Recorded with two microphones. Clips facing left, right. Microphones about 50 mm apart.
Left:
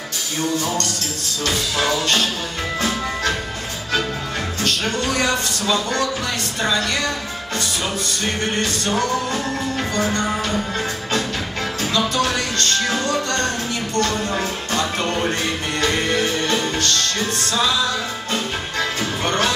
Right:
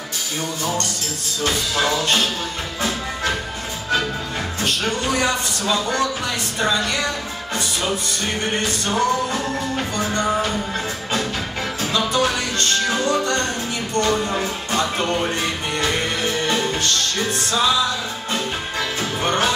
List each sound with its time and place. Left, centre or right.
1.4 s music: centre
4.6 s music: centre
11.9 s music: centre
13.9 s a sound: centre
14.4 s music: centre
16.4 s music: centre
19.2 s music: centre